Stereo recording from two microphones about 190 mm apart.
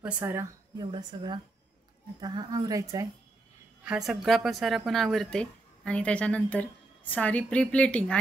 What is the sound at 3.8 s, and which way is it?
Speech, 5° right (ahead or behind).